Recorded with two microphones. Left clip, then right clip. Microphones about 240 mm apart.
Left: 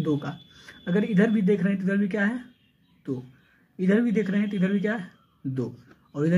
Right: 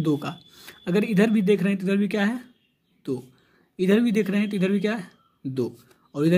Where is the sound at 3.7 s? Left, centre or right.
Right.